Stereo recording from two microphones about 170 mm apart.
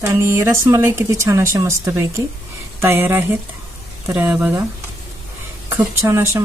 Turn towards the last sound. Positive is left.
turn(degrees=-15)  # may be behind; listen again after turning